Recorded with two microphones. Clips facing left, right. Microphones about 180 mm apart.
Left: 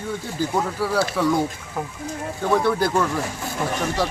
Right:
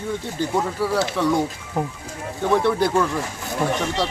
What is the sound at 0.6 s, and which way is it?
Speech, centre (ahead or behind).